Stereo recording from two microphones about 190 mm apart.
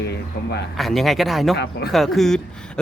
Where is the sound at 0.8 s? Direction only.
Centre (ahead or behind).